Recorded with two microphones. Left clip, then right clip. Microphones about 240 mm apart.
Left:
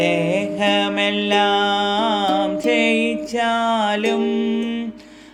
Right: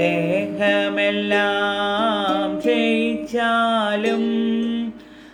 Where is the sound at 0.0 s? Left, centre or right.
Left.